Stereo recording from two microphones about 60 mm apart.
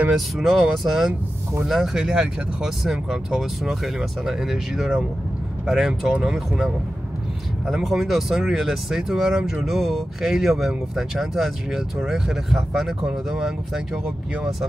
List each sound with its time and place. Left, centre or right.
0.4 s speech: centre